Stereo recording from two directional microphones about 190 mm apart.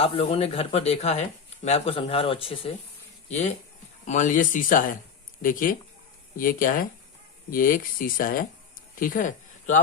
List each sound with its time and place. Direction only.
0.0 s a man's voice: 30° left (ahead or behind)